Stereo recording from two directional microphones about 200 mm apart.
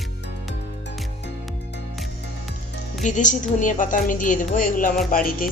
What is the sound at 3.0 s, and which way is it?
A woman's voice, 40° left (ahead or behind).